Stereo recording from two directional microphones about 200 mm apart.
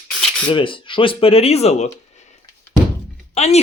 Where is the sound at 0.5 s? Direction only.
25° left (ahead or behind).